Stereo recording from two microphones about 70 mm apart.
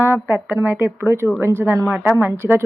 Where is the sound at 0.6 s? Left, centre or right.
Right.